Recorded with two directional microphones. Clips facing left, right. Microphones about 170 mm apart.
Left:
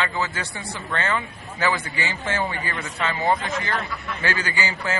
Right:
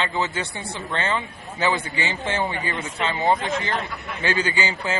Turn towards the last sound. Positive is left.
turn(degrees=-25)  # may be behind; listen again after turning